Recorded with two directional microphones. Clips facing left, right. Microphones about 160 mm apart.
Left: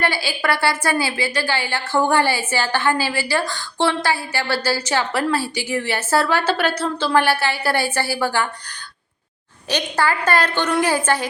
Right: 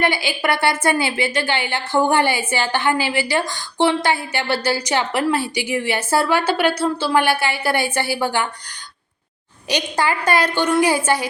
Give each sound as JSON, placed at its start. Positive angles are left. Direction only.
{"t": 0.0, "sound": "a woman's voice", "side_deg": -15}
{"t": 9.6, "sound": "a woman's voice", "side_deg": -15}